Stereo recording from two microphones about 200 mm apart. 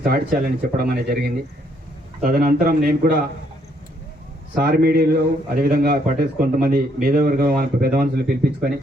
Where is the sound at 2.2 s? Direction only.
45° right (ahead or behind).